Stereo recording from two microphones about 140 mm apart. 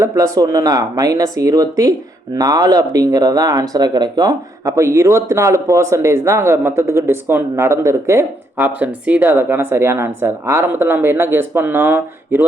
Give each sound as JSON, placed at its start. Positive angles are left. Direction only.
{"t": 0.0, "sound": "speech", "side_deg": -25}